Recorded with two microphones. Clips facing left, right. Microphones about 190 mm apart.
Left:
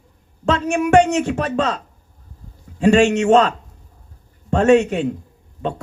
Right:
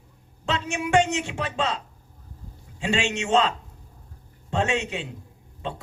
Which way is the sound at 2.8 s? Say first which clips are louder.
Left 13 dB; 45° left (ahead or behind).